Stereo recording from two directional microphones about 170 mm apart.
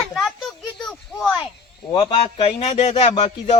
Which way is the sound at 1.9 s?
30° left (ahead or behind).